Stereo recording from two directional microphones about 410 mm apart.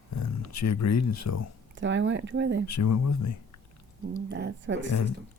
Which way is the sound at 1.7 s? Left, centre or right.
Right.